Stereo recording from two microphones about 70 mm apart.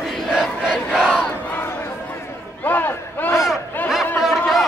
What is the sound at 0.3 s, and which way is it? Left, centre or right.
Crowd, centre.